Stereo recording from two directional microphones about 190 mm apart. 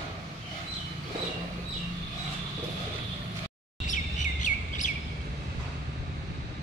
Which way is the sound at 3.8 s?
40° left (ahead or behind).